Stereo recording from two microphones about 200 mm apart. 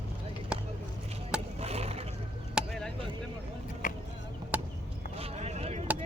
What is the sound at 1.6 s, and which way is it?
Vehicle, 30° right (ahead or behind).